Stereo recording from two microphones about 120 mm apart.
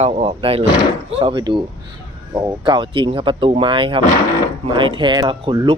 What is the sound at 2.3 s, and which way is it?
Speech, 30° right (ahead or behind).